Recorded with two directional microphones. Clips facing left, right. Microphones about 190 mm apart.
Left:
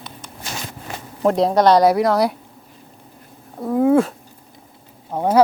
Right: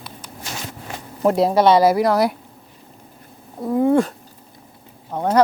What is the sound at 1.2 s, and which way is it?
Speech, 5° right (ahead or behind).